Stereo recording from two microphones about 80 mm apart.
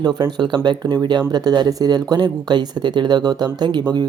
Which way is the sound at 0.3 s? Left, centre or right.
Right.